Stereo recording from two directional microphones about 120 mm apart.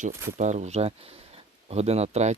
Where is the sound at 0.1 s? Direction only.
20° right (ahead or behind).